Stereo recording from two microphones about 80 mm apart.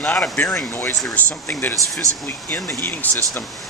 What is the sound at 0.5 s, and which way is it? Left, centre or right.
Speech, left.